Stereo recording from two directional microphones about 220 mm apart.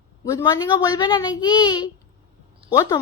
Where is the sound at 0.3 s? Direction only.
15° left (ahead or behind).